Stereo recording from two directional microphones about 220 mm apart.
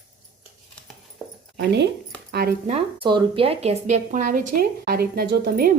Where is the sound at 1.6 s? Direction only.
50° right (ahead or behind).